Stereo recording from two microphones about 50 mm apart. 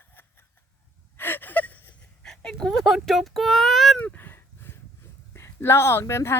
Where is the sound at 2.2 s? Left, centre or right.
Centre.